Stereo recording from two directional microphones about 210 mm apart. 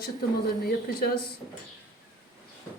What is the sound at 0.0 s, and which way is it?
A woman's voice, 45° left (ahead or behind).